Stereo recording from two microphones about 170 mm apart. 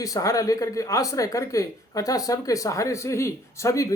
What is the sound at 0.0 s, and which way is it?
Speech, 20° left (ahead or behind).